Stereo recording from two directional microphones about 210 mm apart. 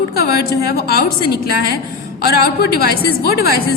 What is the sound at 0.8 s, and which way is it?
A woman's voice, 45° left (ahead or behind).